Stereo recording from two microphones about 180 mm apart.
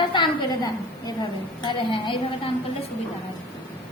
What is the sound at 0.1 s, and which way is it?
A woman's voice, 25° left (ahead or behind).